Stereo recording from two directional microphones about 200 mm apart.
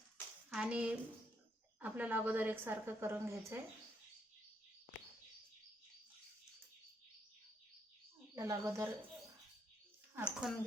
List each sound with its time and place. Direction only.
0.5 s a woman's voice: 5° right (ahead or behind)
8.4 s speech: 15° right (ahead or behind)
10.2 s speech: 5° right (ahead or behind)